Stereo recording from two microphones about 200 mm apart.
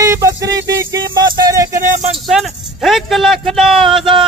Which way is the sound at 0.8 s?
15° right (ahead or behind).